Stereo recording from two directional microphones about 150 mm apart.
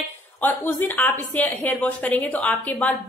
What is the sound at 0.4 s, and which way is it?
A woman's voice, 15° left (ahead or behind).